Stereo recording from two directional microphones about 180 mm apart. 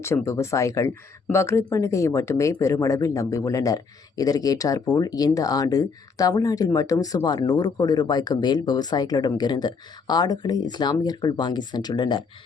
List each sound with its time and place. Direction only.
0.0 s speech: 15° left (ahead or behind)